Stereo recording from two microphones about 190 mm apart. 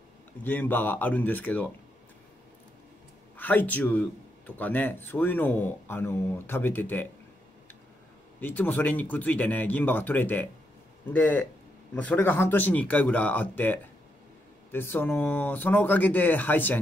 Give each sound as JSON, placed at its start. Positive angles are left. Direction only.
{"t": 0.4, "sound": "speech", "side_deg": 10}
{"t": 3.3, "sound": "speech", "side_deg": 10}
{"t": 8.4, "sound": "speech", "side_deg": 10}